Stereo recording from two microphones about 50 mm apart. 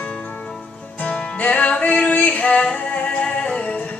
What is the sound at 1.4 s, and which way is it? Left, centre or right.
Music, left.